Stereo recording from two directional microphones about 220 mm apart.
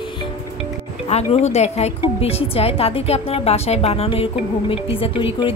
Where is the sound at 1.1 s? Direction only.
30° left (ahead or behind).